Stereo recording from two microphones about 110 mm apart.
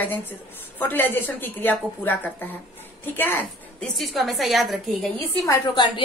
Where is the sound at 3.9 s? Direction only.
Centre (ahead or behind).